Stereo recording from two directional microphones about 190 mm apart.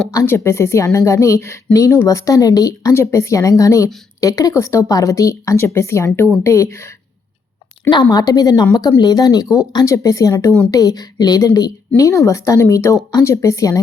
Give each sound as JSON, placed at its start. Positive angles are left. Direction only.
{"t": 0.1, "sound": "speech", "side_deg": 15}
{"t": 8.1, "sound": "speech", "side_deg": 20}